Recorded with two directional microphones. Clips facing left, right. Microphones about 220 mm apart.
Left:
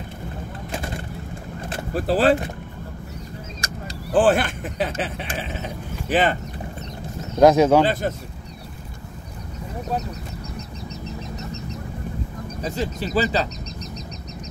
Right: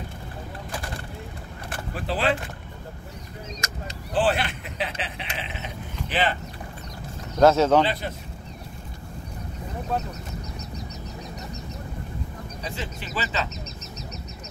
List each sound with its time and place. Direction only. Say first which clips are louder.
0.7 s vehicle: left 6 dB; 25° left (ahead or behind)
2.0 s speech: left 7 dB; 40° left (ahead or behind)
3.6 s a sound: left 2 dB; 30° left (ahead or behind)
4.1 s speech: left 6 dB; 50° left (ahead or behind)
7.3 s speech: left 3 dB; 15° left (ahead or behind)
7.8 s a man's voice: left 5 dB; 45° left (ahead or behind)
12.6 s speech: left 9 dB; 40° left (ahead or behind)